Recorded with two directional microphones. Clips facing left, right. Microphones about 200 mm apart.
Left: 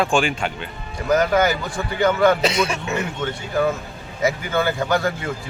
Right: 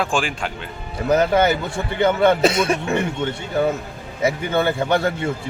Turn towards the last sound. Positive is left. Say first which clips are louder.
# right 2 dB
turn(degrees=-25)  # may be behind; listen again after turning